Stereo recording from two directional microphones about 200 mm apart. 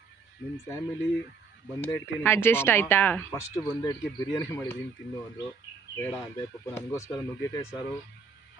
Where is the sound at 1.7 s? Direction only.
10° left (ahead or behind).